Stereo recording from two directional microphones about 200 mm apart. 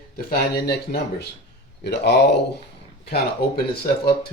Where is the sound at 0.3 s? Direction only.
50° left (ahead or behind).